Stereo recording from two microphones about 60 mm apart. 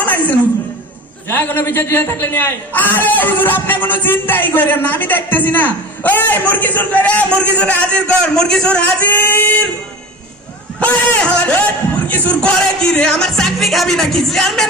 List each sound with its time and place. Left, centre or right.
0.0 s a sound: left
1.3 s a man's voice: left; by 9.0 s centre
9.0 s singing: left
11.2 s speech: left
12.4 s speech: centre